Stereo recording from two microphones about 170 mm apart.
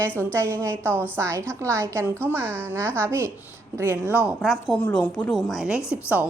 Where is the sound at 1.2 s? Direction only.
15° right (ahead or behind); by 4.8 s centre (ahead or behind).